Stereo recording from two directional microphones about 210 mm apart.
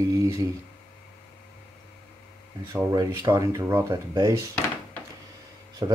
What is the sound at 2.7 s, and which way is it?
Speech, 15° right (ahead or behind).